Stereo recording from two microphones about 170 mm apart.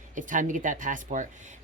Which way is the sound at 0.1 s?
50° right (ahead or behind).